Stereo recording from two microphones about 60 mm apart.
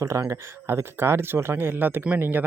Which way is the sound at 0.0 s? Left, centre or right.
Right.